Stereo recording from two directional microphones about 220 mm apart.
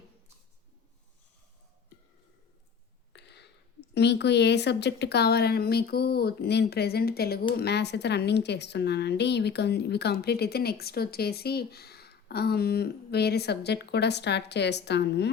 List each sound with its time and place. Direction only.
3.1 s a woman's voice: 50° left (ahead or behind)